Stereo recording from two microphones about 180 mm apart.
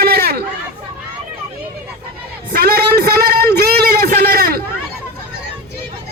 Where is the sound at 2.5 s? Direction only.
55° right (ahead or behind).